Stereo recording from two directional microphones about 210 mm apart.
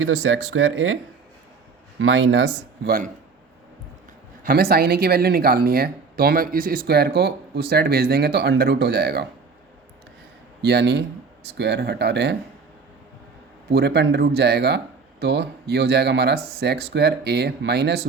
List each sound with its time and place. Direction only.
0.0 s speech: 70° right (ahead or behind)
2.0 s speech: 70° right (ahead or behind); by 3.1 s 45° right (ahead or behind)
4.4 s speech: 45° right (ahead or behind)
10.6 s speech: 50° right (ahead or behind)
13.7 s speech: 50° right (ahead or behind)